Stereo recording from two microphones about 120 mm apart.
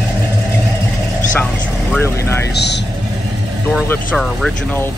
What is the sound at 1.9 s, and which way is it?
Speech, 20° left (ahead or behind).